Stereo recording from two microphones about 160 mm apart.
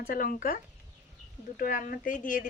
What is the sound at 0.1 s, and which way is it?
Speech, 60° left (ahead or behind).